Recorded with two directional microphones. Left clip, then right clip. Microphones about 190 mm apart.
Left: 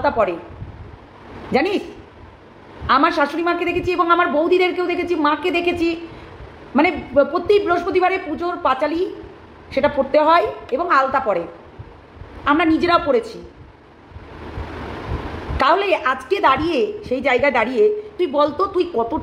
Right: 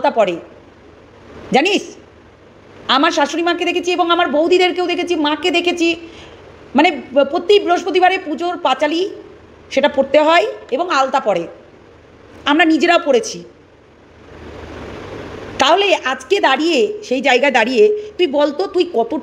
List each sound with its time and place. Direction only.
0.0 s a woman's voice: 35° right (ahead or behind)
1.5 s a woman's voice: 35° right (ahead or behind)
2.9 s a woman's voice: 40° right (ahead or behind)
12.4 s a woman's voice: 35° right (ahead or behind)
15.5 s a woman's voice: 35° right (ahead or behind)